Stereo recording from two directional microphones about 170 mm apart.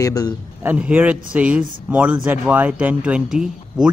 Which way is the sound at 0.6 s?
10° right (ahead or behind).